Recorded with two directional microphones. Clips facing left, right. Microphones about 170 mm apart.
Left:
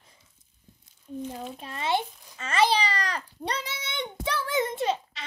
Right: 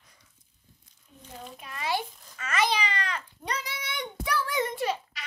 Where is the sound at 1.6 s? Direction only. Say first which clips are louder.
Left 3 dB; 25° left (ahead or behind).